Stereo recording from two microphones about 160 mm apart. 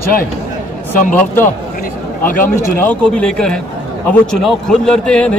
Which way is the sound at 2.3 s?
60° left (ahead or behind).